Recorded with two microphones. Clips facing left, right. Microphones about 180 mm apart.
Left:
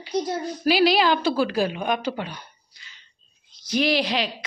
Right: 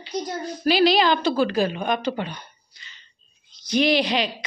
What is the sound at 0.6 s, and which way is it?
A woman's voice, 10° left (ahead or behind).